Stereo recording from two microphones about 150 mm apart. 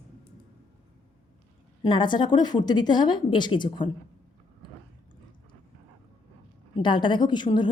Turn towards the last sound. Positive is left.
turn(degrees=30)  # may be behind; listen again after turning